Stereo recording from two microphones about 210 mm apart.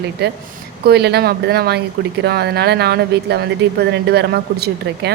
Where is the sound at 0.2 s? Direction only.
50° right (ahead or behind).